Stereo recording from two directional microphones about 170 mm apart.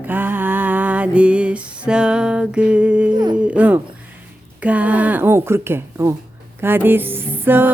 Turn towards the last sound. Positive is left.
turn(degrees=-10)  # may be behind; listen again after turning